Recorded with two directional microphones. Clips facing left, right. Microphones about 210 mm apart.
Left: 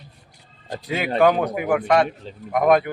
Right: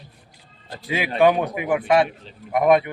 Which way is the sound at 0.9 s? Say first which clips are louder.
Even; centre (ahead or behind).